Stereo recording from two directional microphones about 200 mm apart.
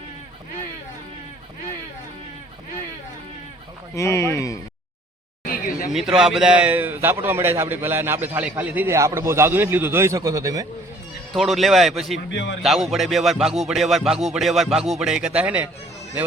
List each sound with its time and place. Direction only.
3.9 s speech: 15° left (ahead or behind)
5.5 s chatter: 45° left (ahead or behind)
5.9 s a man's voice: centre (ahead or behind)
11.3 s speech: centre (ahead or behind)
12.3 s a man's voice: 65° left (ahead or behind)
12.6 s speech: centre (ahead or behind)